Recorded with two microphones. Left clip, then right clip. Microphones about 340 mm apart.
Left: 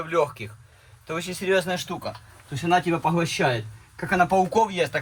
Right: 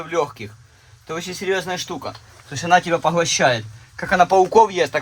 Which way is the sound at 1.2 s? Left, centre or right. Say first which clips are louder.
Even; centre.